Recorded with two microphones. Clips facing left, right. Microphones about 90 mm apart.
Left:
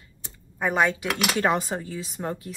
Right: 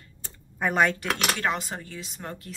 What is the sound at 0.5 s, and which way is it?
Speech, 5° left (ahead or behind).